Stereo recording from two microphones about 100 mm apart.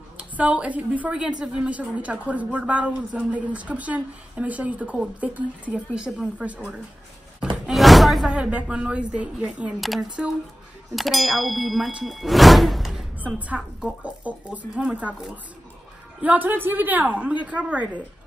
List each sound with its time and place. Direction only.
0.2 s speech: 15° right (ahead or behind)
7.6 s speech: centre (ahead or behind)
9.8 s speech: centre (ahead or behind)
13.2 s speech: 15° right (ahead or behind)
16.2 s speech: 15° right (ahead or behind)